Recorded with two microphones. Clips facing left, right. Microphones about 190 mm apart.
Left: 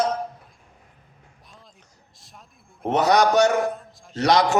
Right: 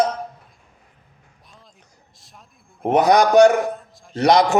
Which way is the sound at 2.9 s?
15° right (ahead or behind).